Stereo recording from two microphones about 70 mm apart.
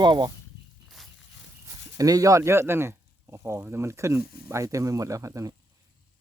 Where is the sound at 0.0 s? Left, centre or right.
Right.